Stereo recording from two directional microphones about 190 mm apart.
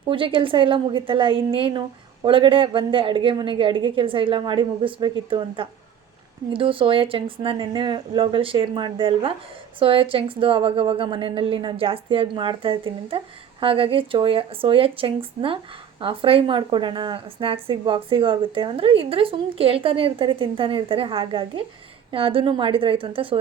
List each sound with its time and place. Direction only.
0.1 s a woman's voice: 25° right (ahead or behind)